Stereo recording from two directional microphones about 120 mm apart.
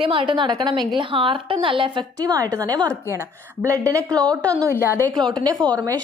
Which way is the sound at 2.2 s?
30° right (ahead or behind).